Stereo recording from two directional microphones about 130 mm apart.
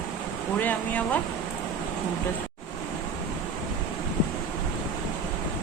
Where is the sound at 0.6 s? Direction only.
15° left (ahead or behind).